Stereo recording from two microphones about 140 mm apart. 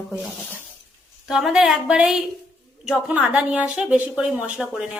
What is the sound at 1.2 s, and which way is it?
A woman's voice, 5° right (ahead or behind).